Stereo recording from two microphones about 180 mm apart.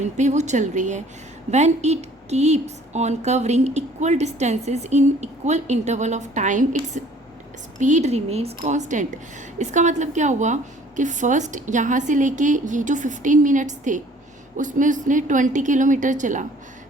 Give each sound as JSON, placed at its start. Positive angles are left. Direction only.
{"t": 0.0, "sound": "a woman's voice", "side_deg": -40}